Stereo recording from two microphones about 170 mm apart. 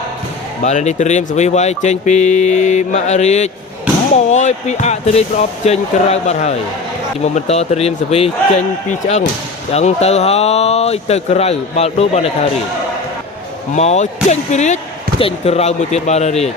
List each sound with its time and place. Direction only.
0.6 s speech: 45° left (ahead or behind)
13.7 s speech: 40° left (ahead or behind)